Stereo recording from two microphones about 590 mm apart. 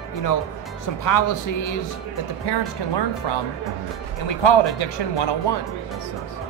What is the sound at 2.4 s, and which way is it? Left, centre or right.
Speech, left.